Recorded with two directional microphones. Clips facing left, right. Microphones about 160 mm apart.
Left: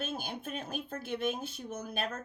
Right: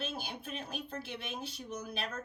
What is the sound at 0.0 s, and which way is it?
A woman's voice, 50° left (ahead or behind).